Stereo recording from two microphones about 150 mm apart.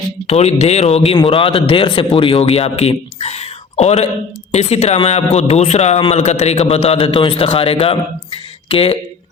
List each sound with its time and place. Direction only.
0.3 s a man's voice: 45° left (ahead or behind)